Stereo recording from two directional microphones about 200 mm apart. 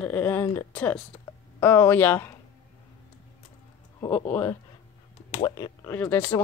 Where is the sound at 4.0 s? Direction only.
10° left (ahead or behind).